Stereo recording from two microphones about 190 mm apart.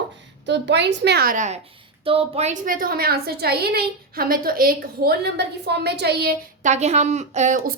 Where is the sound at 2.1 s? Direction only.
30° right (ahead or behind); by 6.3 s 60° right (ahead or behind).